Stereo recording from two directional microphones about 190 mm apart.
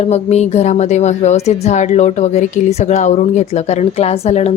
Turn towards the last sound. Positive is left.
turn(degrees=35)  # may be behind; listen again after turning